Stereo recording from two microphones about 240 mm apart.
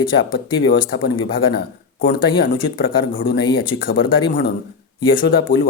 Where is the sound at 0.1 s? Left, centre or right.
Left.